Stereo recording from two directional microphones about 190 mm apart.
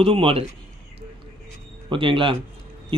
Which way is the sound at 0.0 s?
30° right (ahead or behind).